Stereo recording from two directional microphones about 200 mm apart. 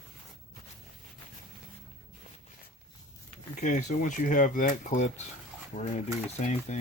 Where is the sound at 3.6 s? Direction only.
40° left (ahead or behind).